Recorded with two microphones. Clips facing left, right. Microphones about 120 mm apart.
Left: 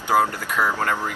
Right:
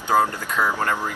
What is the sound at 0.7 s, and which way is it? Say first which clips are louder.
Speech: even; 15° right (ahead or behind).